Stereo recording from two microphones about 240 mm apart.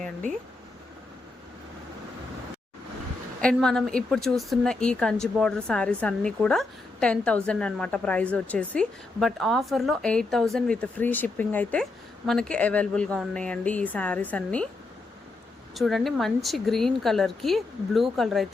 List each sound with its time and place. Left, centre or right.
3.4 s a woman's voice: centre
15.7 s a woman's voice: centre